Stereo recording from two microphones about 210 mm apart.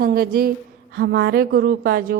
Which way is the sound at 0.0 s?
45° right (ahead or behind).